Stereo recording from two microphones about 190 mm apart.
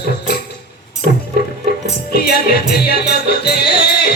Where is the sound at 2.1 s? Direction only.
55° left (ahead or behind).